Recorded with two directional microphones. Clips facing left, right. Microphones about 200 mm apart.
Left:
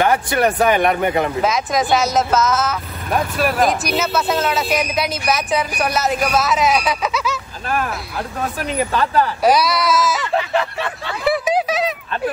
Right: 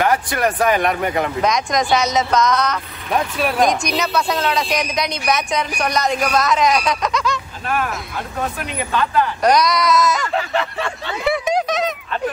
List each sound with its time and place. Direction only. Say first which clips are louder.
0.0 s speech: left 2 dB; 25° left (ahead or behind)
1.4 s speech: even; 5° left (ahead or behind)
8.6 s speech: left 5 dB; 35° left (ahead or behind)
9.4 s speech: right 1 dB; 5° left (ahead or behind)
11.2 s a sound: left 1 dB; 5° left (ahead or behind)